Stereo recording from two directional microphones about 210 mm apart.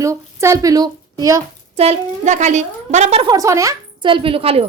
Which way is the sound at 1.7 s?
30° right (ahead or behind).